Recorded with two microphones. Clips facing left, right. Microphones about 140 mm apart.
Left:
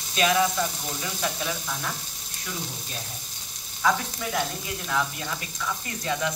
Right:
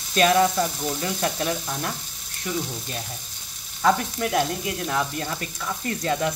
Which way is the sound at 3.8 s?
65° right (ahead or behind).